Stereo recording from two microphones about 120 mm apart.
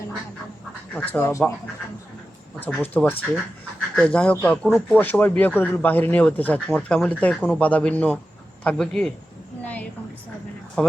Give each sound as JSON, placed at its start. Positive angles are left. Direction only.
{"t": 0.9, "sound": "speech", "side_deg": 15}
{"t": 2.6, "sound": "speech", "side_deg": 10}
{"t": 4.9, "sound": "speech", "side_deg": 15}
{"t": 10.8, "sound": "speech", "side_deg": 10}